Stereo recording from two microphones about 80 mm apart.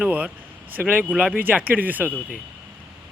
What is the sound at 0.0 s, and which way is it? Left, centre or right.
Speech, centre.